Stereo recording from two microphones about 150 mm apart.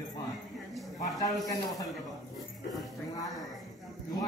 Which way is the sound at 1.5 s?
25° left (ahead or behind).